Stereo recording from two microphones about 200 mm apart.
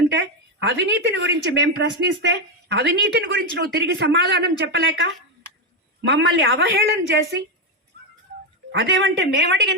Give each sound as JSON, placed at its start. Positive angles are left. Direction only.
{"t": 0.1, "sound": "a woman's voice", "side_deg": -65}
{"t": 8.8, "sound": "a woman's voice", "side_deg": -65}